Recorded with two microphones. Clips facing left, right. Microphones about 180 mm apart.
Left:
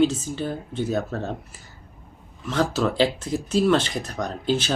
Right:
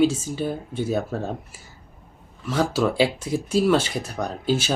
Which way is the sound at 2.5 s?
10° right (ahead or behind).